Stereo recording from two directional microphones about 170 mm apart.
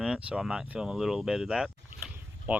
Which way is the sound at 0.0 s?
5° right (ahead or behind).